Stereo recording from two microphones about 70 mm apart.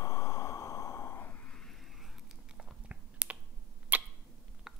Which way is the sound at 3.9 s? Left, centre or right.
Right.